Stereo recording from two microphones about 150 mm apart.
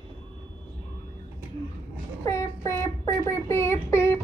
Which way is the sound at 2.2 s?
20° left (ahead or behind).